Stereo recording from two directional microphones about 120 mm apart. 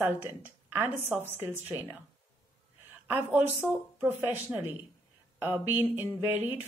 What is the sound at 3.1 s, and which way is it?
Speech, 15° right (ahead or behind).